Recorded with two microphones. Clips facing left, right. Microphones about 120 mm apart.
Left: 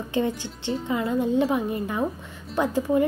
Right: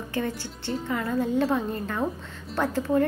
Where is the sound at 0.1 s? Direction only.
20° left (ahead or behind).